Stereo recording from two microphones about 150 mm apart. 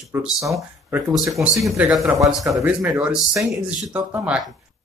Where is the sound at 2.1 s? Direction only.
20° right (ahead or behind).